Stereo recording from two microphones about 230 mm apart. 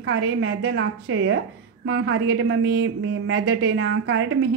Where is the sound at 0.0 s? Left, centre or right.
Right.